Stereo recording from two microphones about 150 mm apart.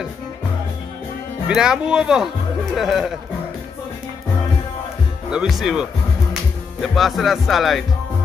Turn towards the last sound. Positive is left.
turn(degrees=0)  # may be behind; listen again after turning